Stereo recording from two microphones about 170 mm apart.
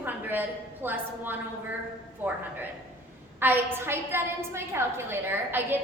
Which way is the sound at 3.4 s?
10° right (ahead or behind).